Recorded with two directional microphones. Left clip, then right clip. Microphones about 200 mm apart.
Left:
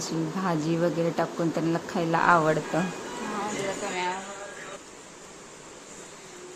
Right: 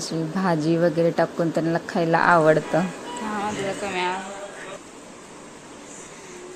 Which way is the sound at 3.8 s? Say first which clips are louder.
Right 6 dB; centre (ahead or behind).